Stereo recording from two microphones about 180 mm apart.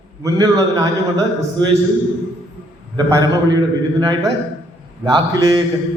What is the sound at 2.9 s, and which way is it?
Speech, 20° right (ahead or behind).